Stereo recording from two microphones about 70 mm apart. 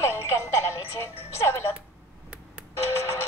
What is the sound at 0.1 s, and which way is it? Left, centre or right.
Music, left.